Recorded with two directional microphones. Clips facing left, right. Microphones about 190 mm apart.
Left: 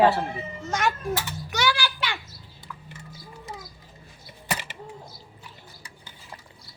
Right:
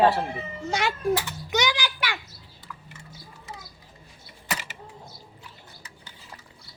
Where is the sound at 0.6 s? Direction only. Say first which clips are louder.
Right 2 dB; 15° right (ahead or behind).